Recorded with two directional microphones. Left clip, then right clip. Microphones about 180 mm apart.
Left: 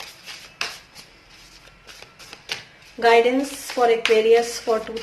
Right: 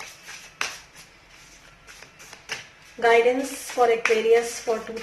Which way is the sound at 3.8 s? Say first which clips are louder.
Left 2 dB; 35° left (ahead or behind).